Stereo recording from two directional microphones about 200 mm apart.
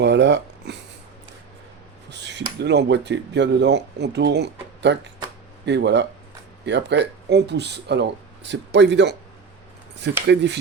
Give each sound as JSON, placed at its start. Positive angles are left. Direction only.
{"t": 0.0, "sound": "speech", "side_deg": -60}
{"t": 2.0, "sound": "speech", "side_deg": -60}